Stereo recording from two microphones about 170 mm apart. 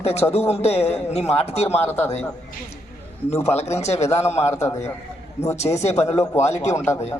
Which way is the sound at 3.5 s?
40° left (ahead or behind).